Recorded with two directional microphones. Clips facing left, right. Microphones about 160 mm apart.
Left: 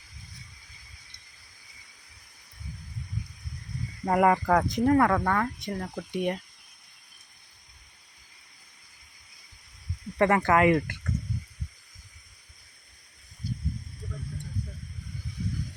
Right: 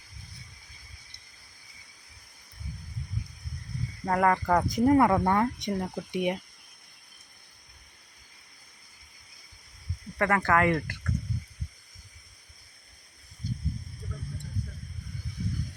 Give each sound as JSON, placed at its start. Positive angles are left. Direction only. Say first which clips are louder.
{"t": 4.0, "sound": "speech", "louder": "left 2 dB", "side_deg": 10}
{"t": 4.4, "sound": "speech", "louder": "even", "side_deg": -5}
{"t": 4.9, "sound": "speech", "louder": "right 2 dB", "side_deg": -15}
{"t": 10.2, "sound": "speech", "louder": "left 3 dB", "side_deg": 25}
{"t": 13.4, "sound": "snake", "louder": "left 1 dB", "side_deg": 5}